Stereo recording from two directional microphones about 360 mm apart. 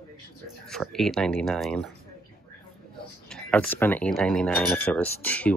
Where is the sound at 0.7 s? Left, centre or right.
Centre.